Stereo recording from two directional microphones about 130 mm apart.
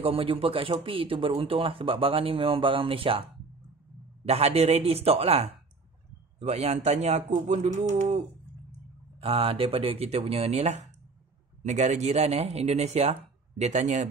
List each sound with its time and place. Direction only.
0.0 s a man's voice: 45° right (ahead or behind)
4.3 s a man's voice: 50° right (ahead or behind)
9.2 s a man's voice: 45° right (ahead or behind); by 14.0 s 65° right (ahead or behind)